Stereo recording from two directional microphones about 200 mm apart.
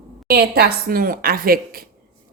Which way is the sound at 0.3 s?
50° right (ahead or behind).